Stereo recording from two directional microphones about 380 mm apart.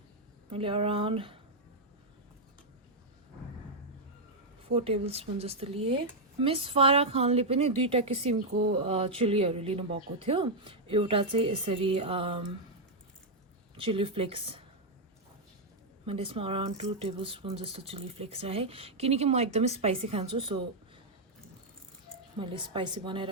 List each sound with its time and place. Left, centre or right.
0.5 s speech: centre
4.7 s speech: centre
13.7 s speech: centre
16.0 s speech: centre
22.4 s speech: centre